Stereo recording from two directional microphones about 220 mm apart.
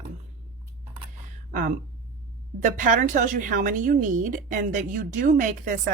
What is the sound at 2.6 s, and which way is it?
Speech, 35° right (ahead or behind).